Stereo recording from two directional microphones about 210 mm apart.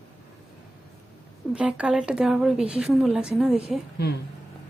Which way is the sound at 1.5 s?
5° right (ahead or behind).